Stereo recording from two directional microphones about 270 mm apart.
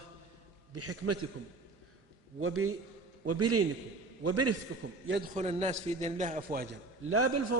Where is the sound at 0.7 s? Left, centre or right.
Right.